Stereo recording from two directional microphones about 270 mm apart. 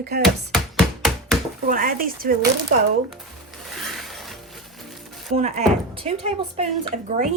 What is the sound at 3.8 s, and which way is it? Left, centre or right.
Mechanisms, centre.